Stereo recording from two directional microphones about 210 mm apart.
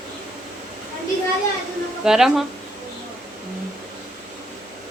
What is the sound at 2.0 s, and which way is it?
Speech, centre (ahead or behind).